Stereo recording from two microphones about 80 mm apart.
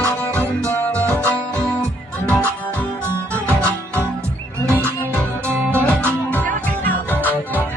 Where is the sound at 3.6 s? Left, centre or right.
Right.